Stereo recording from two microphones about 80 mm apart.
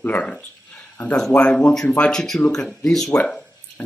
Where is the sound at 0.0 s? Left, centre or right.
Centre.